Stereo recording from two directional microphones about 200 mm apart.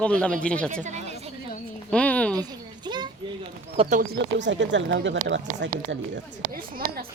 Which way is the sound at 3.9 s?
45° right (ahead or behind).